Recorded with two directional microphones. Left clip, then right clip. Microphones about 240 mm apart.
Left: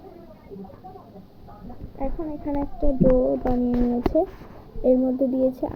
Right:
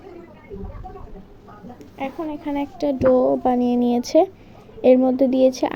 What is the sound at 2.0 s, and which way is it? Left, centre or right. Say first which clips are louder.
Speech: right 3 dB; right.